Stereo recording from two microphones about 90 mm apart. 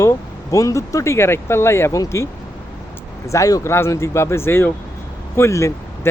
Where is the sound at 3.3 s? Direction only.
40° left (ahead or behind).